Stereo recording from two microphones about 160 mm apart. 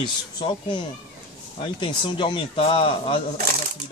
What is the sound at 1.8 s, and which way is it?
Speech, 30° left (ahead or behind).